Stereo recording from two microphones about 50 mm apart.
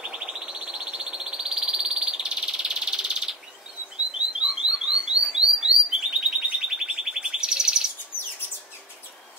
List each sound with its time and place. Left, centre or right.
0.0 s frog: centre
4.4 s bird: centre